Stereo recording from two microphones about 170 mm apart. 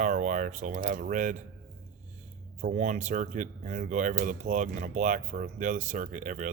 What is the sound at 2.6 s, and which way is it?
Speech, 50° right (ahead or behind).